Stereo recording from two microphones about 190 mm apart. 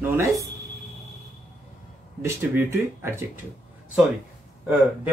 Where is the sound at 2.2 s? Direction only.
10° right (ahead or behind).